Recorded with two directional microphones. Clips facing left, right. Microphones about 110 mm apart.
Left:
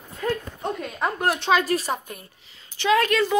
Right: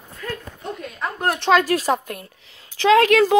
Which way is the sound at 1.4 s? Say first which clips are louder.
Right 7 dB; 80° right.